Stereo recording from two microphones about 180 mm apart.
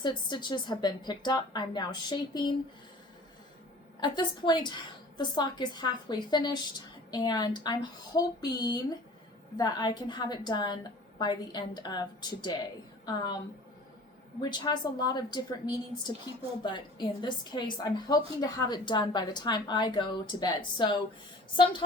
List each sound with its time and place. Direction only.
0.0 s a woman's voice: 25° left (ahead or behind)
4.0 s a woman's voice: 25° left (ahead or behind)
14.5 s a woman's voice: 25° left (ahead or behind)